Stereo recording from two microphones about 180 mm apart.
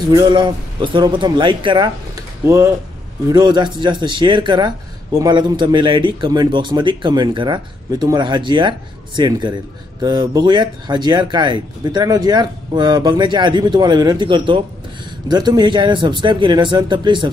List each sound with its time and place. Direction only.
0.1 s speech: 25° right (ahead or behind)